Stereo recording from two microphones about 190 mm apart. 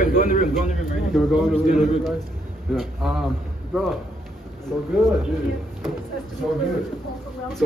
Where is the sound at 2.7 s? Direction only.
Centre (ahead or behind).